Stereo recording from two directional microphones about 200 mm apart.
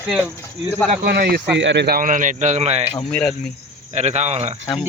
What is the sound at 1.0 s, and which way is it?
Speech, 50° right (ahead or behind).